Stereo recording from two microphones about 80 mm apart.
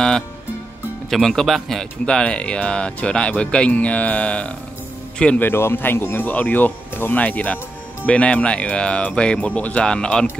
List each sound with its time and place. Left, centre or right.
1.1 s speech: centre
5.4 s speech: left; by 10.2 s centre